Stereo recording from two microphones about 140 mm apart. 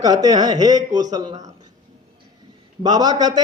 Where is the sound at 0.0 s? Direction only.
25° right (ahead or behind).